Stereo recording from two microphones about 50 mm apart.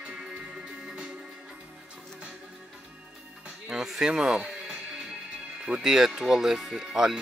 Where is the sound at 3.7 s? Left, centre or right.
Centre.